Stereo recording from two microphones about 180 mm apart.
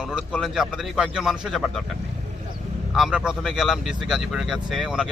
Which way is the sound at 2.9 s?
5° right (ahead or behind).